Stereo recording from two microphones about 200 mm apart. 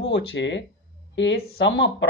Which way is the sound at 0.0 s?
65° left (ahead or behind).